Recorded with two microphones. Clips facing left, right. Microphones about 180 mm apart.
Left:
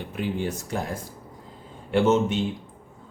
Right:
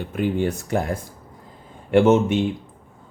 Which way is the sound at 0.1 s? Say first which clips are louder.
Right 6 dB; 55° right (ahead or behind).